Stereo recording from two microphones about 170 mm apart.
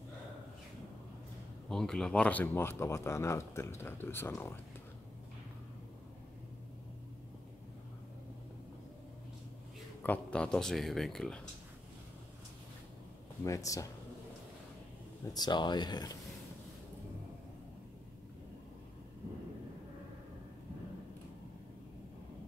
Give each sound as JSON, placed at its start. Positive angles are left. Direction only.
{"t": 1.7, "sound": "speech", "side_deg": 5}
{"t": 10.0, "sound": "speech", "side_deg": 10}
{"t": 13.4, "sound": "speech", "side_deg": 20}
{"t": 15.3, "sound": "speech", "side_deg": 25}